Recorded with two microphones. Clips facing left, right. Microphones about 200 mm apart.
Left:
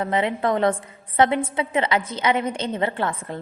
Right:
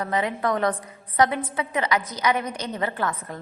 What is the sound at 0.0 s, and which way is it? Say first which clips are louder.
A woman's voice: left 3 dB; 25° left (ahead or behind).